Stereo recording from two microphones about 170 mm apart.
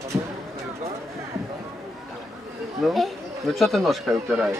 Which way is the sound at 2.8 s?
Centre (ahead or behind).